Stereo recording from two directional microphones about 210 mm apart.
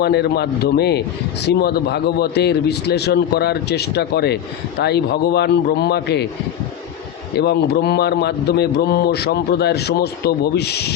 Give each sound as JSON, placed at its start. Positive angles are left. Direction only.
{"t": 0.0, "sound": "a man's voice", "side_deg": 50}
{"t": 7.3, "sound": "a man's voice", "side_deg": 50}